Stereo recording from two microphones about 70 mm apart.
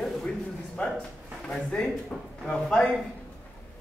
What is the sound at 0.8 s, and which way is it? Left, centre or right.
A man's voice, left.